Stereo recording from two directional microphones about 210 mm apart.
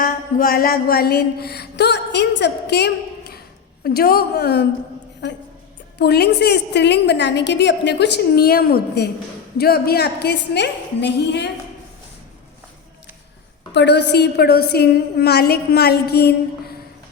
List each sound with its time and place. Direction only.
0.0 s a sound: 45° left (ahead or behind)
3.8 s a woman's voice: 45° left (ahead or behind)
6.0 s a woman's voice: 50° left (ahead or behind)
13.7 s a woman's voice: 55° left (ahead or behind)